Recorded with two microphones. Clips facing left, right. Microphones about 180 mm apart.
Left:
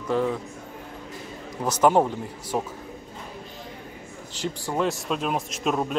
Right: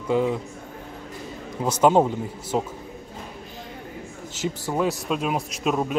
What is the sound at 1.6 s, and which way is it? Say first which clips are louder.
A man's voice: right 2 dB; 15° right (ahead or behind).